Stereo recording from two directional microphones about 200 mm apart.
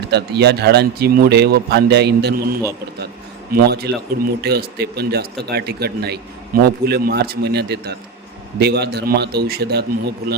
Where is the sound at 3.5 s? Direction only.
55° right (ahead or behind).